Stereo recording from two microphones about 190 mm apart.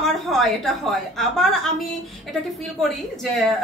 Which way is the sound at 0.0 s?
Centre (ahead or behind).